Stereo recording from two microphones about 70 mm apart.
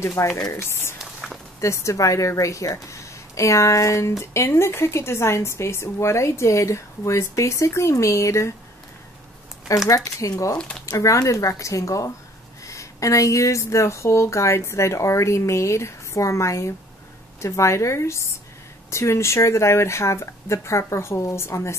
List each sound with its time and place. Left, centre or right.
0.0 s speech: left
0.9 s a sound: centre
1.6 s a woman's voice: left
9.8 s a woman's voice: left